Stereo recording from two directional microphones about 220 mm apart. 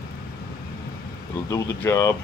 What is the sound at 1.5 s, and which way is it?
Speech, 15° left (ahead or behind).